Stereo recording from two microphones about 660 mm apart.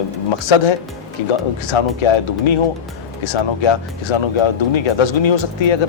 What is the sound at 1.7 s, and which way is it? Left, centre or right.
Speech, left.